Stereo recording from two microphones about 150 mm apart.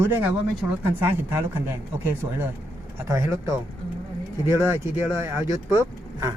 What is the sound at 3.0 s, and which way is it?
Speech, 20° right (ahead or behind).